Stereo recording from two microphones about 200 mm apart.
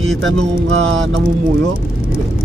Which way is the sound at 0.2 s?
75° right (ahead or behind).